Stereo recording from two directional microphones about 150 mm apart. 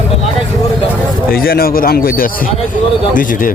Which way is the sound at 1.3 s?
80° left.